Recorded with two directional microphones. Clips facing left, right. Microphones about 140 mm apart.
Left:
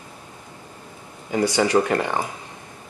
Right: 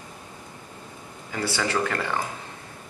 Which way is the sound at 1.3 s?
20° left (ahead or behind).